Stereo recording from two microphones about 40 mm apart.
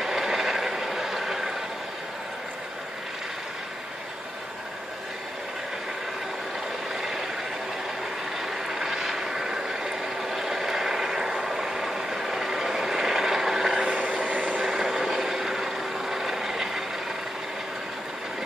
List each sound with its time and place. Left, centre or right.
0.0 s vehicle: centre
7.0 s vehicle: centre
8.4 s vehicle: centre
14.2 s vehicle: right
14.6 s vehicle: centre